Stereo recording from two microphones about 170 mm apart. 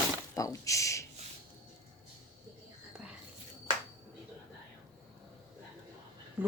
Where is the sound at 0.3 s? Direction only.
20° left (ahead or behind).